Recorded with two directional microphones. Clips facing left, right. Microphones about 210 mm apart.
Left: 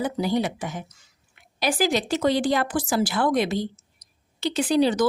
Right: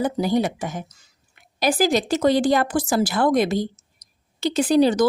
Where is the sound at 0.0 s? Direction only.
45° right (ahead or behind).